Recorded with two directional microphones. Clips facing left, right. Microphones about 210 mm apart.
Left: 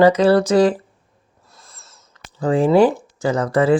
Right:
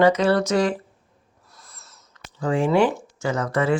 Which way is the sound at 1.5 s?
25° left (ahead or behind).